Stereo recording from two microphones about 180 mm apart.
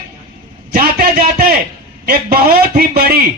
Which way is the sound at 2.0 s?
55° right (ahead or behind).